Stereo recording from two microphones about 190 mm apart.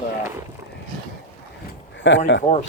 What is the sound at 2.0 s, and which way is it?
Speech, 70° left (ahead or behind).